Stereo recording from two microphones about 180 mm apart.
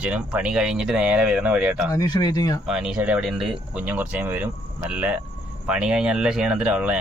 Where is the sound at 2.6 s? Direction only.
5° right (ahead or behind).